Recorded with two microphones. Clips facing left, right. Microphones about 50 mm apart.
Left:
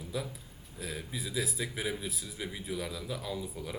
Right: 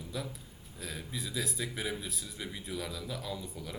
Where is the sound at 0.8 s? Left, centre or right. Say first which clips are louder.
Left 2 dB; centre.